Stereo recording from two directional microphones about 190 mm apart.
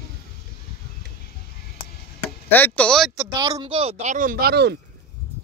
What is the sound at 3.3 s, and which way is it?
Speech, 20° right (ahead or behind).